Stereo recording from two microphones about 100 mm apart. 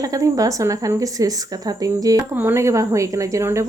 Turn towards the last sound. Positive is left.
turn(degrees=-30)  # may be behind; listen again after turning